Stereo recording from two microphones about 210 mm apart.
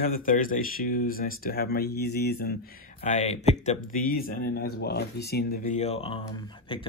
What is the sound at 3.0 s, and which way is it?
Speech, 30° left (ahead or behind).